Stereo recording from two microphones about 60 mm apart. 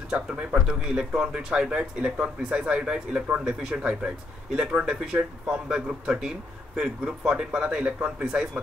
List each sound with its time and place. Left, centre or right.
0.1 s speech: centre